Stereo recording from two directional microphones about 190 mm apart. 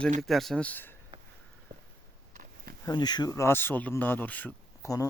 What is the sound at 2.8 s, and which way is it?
Speech, 20° left (ahead or behind).